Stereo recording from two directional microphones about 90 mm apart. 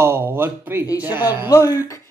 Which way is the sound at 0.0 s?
30° right (ahead or behind).